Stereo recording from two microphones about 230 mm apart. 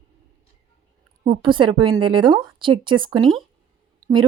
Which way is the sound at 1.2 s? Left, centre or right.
Right.